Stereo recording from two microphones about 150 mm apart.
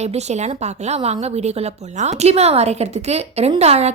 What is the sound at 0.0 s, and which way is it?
A woman's voice, 45° right (ahead or behind).